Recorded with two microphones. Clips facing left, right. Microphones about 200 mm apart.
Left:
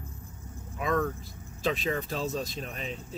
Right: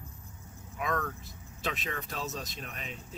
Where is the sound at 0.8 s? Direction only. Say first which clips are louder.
Left 5 dB; 35° left (ahead or behind).